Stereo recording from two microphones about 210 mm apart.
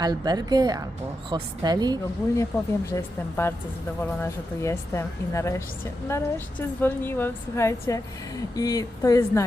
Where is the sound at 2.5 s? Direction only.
15° left (ahead or behind).